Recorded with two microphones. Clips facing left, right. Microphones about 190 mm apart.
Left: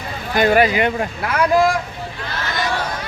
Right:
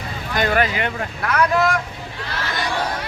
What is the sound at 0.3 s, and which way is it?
Speech, 10° left (ahead or behind).